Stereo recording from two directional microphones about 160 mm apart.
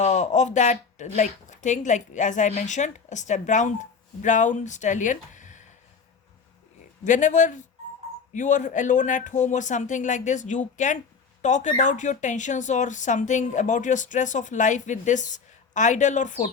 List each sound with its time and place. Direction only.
0.0 s speech: 45° left (ahead or behind)
7.0 s speech: 50° left (ahead or behind)